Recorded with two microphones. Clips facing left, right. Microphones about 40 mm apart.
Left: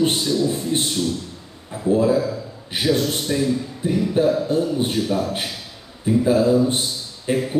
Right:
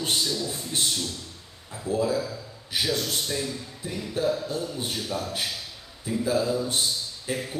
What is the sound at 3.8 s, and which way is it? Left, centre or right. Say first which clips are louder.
A man's voice: left 9 dB; left.